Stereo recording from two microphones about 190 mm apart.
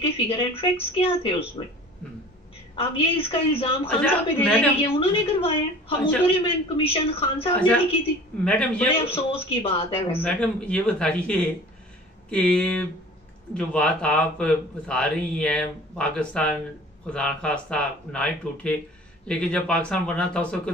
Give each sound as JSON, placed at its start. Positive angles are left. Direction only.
{"t": 0.0, "sound": "a woman's voice", "side_deg": 30}
{"t": 2.7, "sound": "a woman's voice", "side_deg": 30}
{"t": 4.0, "sound": "a man's voice", "side_deg": 5}
{"t": 4.8, "sound": "a woman's voice", "side_deg": 30}
{"t": 8.5, "sound": "speech", "side_deg": 5}
{"t": 9.0, "sound": "a woman's voice", "side_deg": 30}
{"t": 10.2, "sound": "speech", "side_deg": 5}